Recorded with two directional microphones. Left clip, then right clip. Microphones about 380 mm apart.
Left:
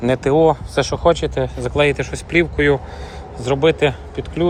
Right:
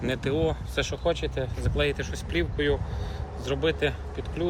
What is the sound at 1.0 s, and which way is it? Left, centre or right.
Speech, centre.